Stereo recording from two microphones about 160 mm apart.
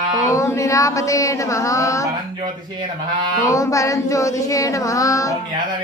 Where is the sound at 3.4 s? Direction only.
20° left (ahead or behind).